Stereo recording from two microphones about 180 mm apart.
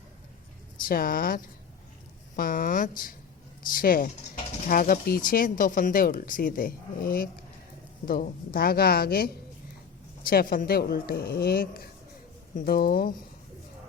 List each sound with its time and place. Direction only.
0.8 s a woman's voice: 50° left (ahead or behind)